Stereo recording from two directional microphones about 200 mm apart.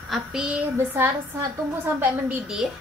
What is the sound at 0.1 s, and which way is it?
A woman's voice, 5° right (ahead or behind).